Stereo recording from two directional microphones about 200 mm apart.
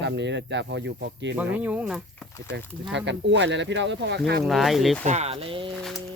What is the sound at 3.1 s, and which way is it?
Speech, 65° right (ahead or behind).